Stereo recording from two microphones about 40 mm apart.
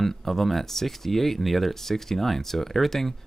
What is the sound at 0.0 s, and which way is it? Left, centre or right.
Speech, centre.